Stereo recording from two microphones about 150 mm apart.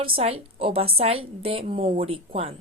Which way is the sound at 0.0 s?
40° right (ahead or behind).